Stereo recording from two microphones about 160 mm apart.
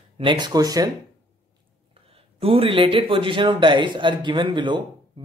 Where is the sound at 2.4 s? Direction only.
35° right (ahead or behind).